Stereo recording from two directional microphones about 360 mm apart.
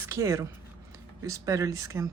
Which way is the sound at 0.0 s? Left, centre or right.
Centre.